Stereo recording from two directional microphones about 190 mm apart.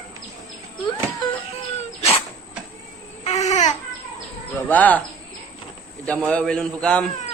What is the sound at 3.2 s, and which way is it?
Baby cry, 35° left (ahead or behind).